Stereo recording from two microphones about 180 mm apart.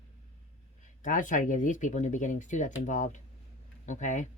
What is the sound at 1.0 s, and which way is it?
Speech, 45° left (ahead or behind).